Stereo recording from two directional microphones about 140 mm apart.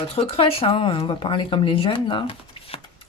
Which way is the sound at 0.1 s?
45° left (ahead or behind).